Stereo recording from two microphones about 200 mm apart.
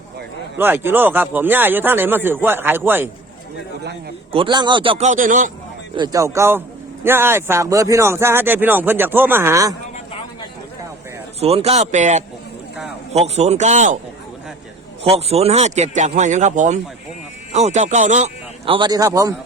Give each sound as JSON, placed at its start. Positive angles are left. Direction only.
{"t": 0.5, "sound": "speech", "side_deg": -10}
{"t": 4.3, "sound": "a man's voice", "side_deg": -25}
{"t": 6.0, "sound": "speech", "side_deg": -15}
{"t": 11.3, "sound": "speech", "side_deg": -30}
{"t": 15.0, "sound": "a man's voice", "side_deg": -30}
{"t": 18.7, "sound": "speech", "side_deg": -20}